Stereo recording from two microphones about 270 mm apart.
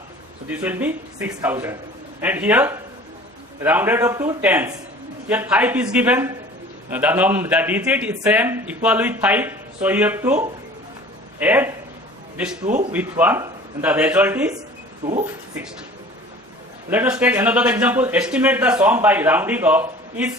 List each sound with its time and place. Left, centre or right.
0.4 s a man's voice: centre
12.6 s speech: right
12.9 s a man's voice: centre
15.0 s speech: right
16.9 s a man's voice: centre